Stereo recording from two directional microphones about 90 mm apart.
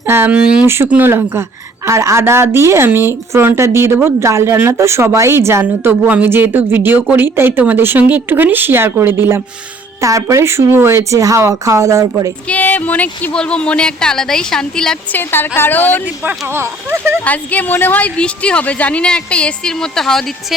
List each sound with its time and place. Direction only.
0.0 s a woman's voice: 25° right (ahead or behind)
10.0 s speech: 35° right (ahead or behind)
12.5 s a woman's voice: 20° left (ahead or behind)
15.1 s a woman's voice: 25° left (ahead or behind)
16.5 s a woman's voice: 30° right (ahead or behind)
17.2 s a woman's voice: 20° left (ahead or behind)